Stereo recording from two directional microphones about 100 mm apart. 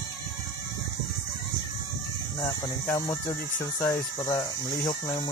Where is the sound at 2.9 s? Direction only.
35° left (ahead or behind).